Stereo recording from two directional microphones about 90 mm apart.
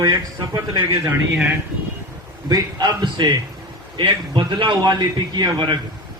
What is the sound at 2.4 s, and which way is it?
A man's voice, 45° right (ahead or behind).